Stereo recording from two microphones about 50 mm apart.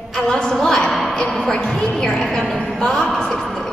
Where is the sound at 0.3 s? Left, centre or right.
Centre.